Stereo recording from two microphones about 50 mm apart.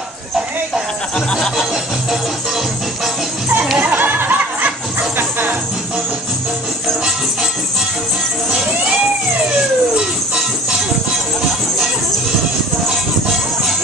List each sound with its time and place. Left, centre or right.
1.1 s music: centre
3.8 s snicker: right